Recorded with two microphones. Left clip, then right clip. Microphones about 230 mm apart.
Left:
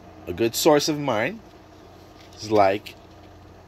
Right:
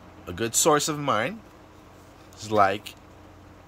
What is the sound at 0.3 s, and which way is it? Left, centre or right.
Speech, right.